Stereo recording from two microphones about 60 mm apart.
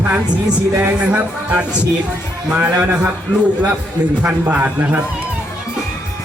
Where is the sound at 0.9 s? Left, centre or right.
Right.